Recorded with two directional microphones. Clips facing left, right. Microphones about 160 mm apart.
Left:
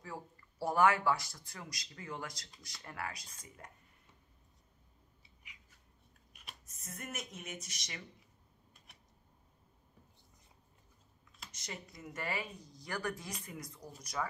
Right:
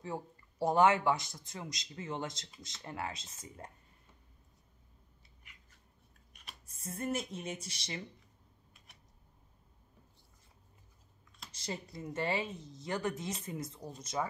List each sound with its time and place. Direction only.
0.0 s speech: 25° right (ahead or behind)
6.6 s speech: 30° right (ahead or behind)
11.5 s speech: 30° right (ahead or behind)